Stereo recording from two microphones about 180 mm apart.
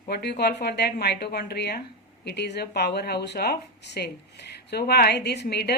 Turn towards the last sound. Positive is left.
turn(degrees=60)  # may be behind; listen again after turning